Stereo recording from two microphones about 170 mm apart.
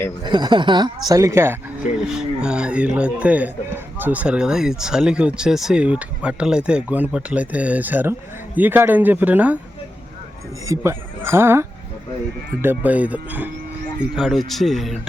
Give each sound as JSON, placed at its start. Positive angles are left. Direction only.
{"t": 0.3, "sound": "speech", "side_deg": -25}
{"t": 2.0, "sound": "speech", "side_deg": -5}
{"t": 10.7, "sound": "speech", "side_deg": -15}
{"t": 12.6, "sound": "speech", "side_deg": -10}